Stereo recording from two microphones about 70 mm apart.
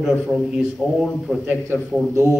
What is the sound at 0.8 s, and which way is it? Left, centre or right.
Speech, centre.